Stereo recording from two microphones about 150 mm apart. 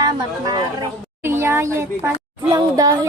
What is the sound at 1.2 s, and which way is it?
A child's voice, 15° right (ahead or behind).